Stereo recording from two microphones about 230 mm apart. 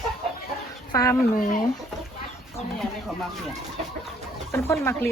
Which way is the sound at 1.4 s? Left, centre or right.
Left.